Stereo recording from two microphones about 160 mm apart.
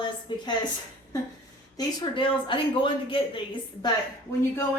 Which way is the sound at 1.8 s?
30° left (ahead or behind).